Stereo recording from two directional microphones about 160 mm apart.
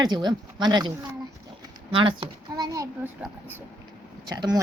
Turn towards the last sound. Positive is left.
turn(degrees=-25)  # may be behind; listen again after turning